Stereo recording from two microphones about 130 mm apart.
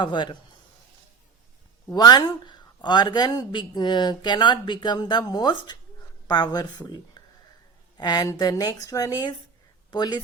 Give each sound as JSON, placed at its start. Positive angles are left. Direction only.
{"t": 0.0, "sound": "speech", "side_deg": 35}
{"t": 1.9, "sound": "a woman's voice", "side_deg": 30}